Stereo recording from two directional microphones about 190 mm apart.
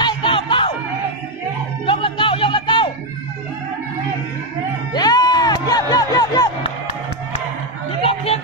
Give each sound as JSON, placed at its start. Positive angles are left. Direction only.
{"t": 0.0, "sound": "music", "side_deg": 25}
{"t": 1.9, "sound": "music", "side_deg": 25}
{"t": 4.9, "sound": "music", "side_deg": 20}
{"t": 8.0, "sound": "a sound", "side_deg": 30}